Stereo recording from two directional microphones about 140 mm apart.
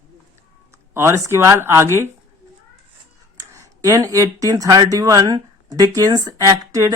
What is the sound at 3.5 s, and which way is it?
A man's voice, 25° right (ahead or behind).